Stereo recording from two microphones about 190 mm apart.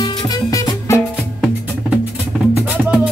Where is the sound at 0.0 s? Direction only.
20° left (ahead or behind).